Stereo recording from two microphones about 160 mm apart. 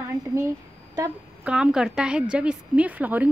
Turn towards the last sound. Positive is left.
turn(degrees=-10)  # may be behind; listen again after turning